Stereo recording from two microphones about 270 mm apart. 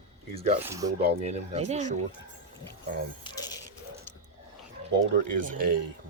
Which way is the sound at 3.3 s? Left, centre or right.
Centre.